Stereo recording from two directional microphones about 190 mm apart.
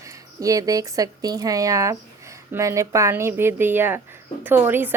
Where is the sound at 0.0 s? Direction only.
15° right (ahead or behind).